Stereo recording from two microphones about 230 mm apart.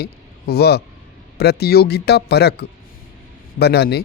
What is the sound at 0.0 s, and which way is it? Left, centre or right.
Speech, left.